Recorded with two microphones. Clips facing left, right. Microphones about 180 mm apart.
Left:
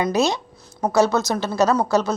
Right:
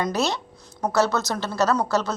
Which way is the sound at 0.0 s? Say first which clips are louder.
Left 4 dB; 15° left (ahead or behind).